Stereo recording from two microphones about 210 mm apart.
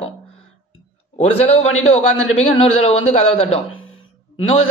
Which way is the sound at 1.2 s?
30° left (ahead or behind).